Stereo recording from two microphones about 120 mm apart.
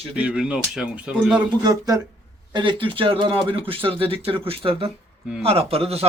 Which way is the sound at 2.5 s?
40° right (ahead or behind).